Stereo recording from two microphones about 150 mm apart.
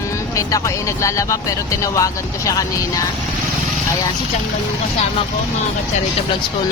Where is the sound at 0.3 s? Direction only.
20° left (ahead or behind).